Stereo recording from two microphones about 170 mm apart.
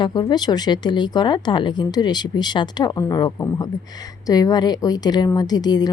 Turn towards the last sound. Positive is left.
turn(degrees=25)  # may be behind; listen again after turning